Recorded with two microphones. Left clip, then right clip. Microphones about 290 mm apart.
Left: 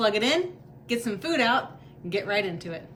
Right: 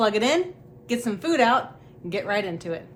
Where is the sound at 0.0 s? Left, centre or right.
Centre.